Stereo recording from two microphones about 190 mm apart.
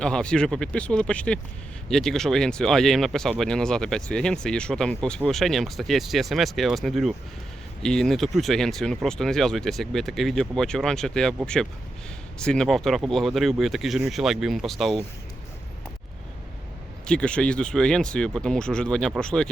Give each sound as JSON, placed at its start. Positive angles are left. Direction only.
{"t": 0.0, "sound": "speech", "side_deg": 5}
{"t": 12.4, "sound": "speech", "side_deg": 5}
{"t": 17.1, "sound": "speech", "side_deg": 5}